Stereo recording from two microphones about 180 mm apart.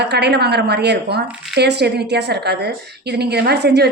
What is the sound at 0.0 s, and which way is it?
A woman's voice, 70° right (ahead or behind).